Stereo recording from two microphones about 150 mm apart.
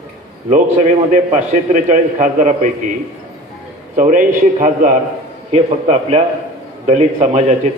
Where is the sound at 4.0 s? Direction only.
55° right (ahead or behind).